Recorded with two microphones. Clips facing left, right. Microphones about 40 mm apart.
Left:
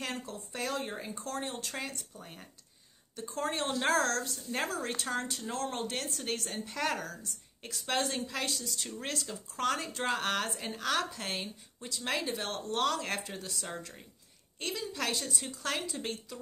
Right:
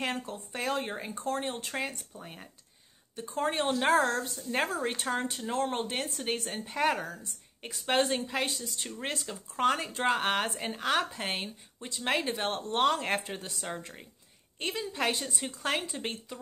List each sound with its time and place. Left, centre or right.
0.0 s speech: right